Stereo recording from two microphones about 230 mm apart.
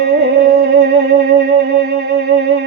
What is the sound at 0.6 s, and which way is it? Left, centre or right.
Music, right.